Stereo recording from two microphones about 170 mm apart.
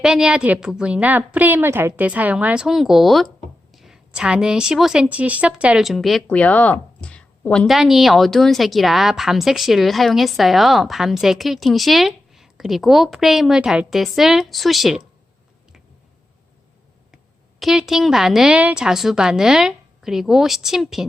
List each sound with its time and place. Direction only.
0.0 s a woman's voice: 5° right (ahead or behind)
17.6 s a woman's voice: centre (ahead or behind)